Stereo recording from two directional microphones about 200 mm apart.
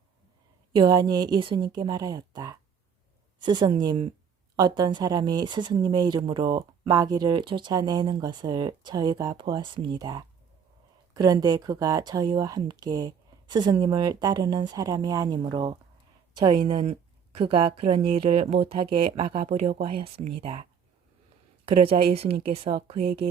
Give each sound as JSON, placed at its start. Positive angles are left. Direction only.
{"t": 0.8, "sound": "speech", "side_deg": -20}
{"t": 21.7, "sound": "speech", "side_deg": -25}